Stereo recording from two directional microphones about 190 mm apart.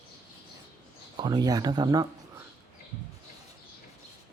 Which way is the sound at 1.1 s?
20° right (ahead or behind).